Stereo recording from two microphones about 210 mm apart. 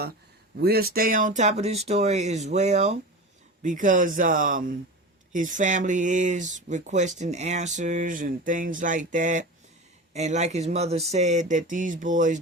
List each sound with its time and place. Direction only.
0.5 s speech: 50° right (ahead or behind)